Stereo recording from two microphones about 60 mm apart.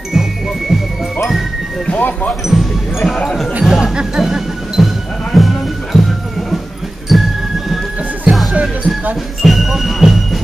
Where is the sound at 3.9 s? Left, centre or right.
Centre.